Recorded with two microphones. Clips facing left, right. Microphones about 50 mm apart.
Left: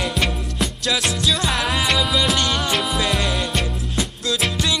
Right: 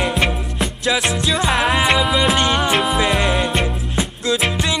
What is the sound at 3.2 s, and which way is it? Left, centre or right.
Music, right.